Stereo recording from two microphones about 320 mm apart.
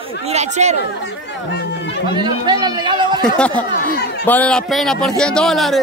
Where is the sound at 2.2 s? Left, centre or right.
Centre.